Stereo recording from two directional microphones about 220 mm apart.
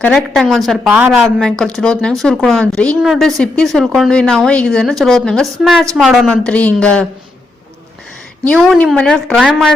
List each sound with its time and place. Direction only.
0.0 s speech: 5° left (ahead or behind)
8.4 s speech: 5° left (ahead or behind)